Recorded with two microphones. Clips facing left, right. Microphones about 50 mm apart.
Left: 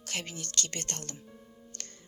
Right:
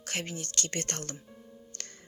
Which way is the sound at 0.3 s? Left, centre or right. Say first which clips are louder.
Even; left.